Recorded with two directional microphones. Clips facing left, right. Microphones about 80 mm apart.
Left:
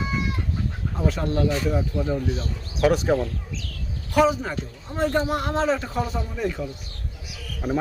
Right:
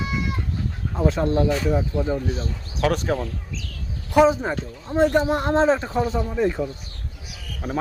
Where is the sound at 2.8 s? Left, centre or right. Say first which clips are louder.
Left 2 dB; centre.